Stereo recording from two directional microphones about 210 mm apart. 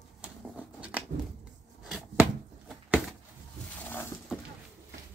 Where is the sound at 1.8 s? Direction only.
5° right (ahead or behind).